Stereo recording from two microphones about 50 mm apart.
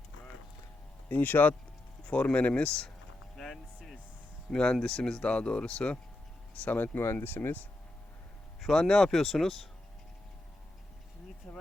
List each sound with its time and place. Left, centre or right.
1.0 s speech: left
2.0 s speech: left
3.3 s music: centre
4.5 s speech: centre
6.6 s speech: left
7.0 s speech: left
7.3 s speech: left
8.6 s speech: centre
11.5 s speech: left